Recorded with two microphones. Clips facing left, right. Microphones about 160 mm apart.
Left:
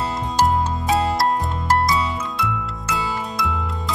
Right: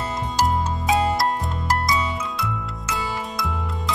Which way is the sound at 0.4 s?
Centre (ahead or behind).